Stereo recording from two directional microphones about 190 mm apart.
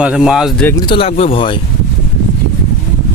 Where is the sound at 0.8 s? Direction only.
25° left (ahead or behind).